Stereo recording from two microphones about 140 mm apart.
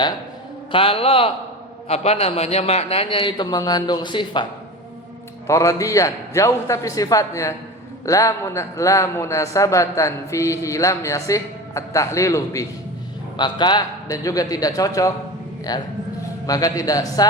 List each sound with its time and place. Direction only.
0.7 s a man's voice: 40° left (ahead or behind)
5.5 s a man's voice: 20° left (ahead or behind)
13.3 s a man's voice: 35° left (ahead or behind)